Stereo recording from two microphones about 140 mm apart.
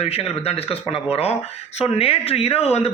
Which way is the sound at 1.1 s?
45° left (ahead or behind).